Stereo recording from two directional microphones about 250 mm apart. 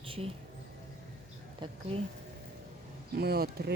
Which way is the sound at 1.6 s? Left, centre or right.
Centre.